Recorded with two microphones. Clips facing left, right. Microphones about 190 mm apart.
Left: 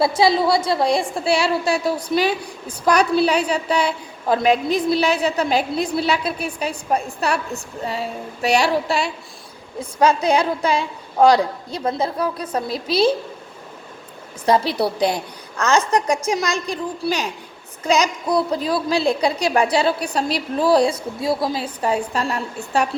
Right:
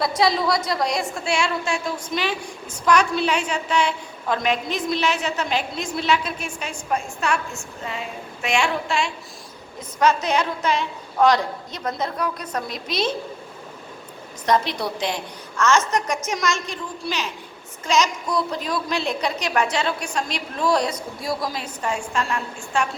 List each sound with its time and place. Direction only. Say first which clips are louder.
0.0 s a woman's voice: left 4 dB; 30° left (ahead or behind)
14.4 s a woman's voice: left 4 dB; 30° left (ahead or behind)